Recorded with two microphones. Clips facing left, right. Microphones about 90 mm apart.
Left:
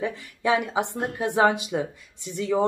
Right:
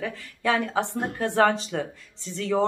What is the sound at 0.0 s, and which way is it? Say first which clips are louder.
Speech: left 1 dB; 15° left (ahead or behind).